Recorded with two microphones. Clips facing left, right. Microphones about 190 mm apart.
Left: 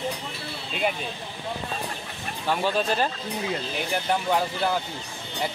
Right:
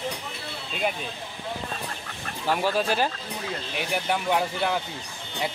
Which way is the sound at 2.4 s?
10° right (ahead or behind).